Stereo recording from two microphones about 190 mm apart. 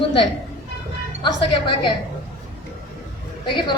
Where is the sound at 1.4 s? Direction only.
25° left (ahead or behind).